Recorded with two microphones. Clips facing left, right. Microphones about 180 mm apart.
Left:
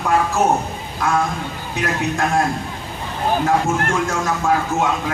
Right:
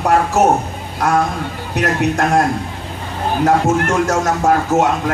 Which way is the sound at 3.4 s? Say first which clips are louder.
Right 8 dB; 45° right (ahead or behind).